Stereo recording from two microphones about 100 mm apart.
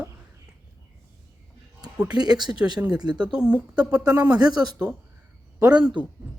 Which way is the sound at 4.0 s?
40° right (ahead or behind).